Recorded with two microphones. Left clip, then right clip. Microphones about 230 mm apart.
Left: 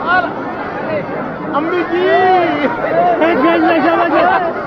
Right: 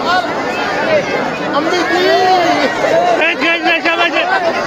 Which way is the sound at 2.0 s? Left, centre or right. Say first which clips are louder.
Left 1 dB; right.